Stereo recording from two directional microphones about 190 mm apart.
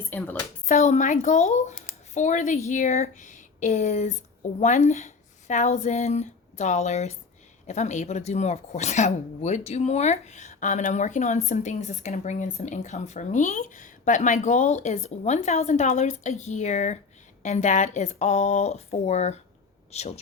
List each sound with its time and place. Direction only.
0.1 s speech: 10° left (ahead or behind)
0.6 s a man's voice: 35° left (ahead or behind)